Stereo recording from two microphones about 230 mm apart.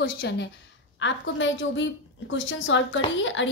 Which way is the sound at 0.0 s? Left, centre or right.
Left.